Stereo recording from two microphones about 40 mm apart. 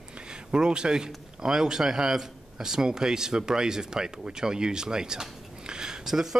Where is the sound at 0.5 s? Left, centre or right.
Right.